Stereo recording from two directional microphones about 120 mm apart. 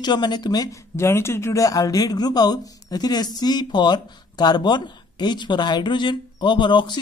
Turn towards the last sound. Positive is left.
turn(degrees=40)  # may be behind; listen again after turning